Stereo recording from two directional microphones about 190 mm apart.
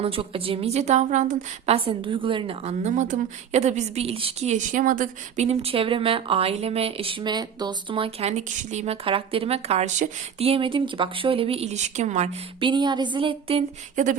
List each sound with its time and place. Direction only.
0.0 s a woman's voice: 30° right (ahead or behind)